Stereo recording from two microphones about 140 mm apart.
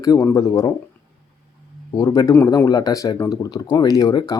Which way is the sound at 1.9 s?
25° left (ahead or behind).